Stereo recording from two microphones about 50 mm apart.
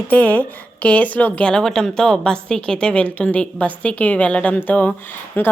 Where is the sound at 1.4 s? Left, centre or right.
Centre.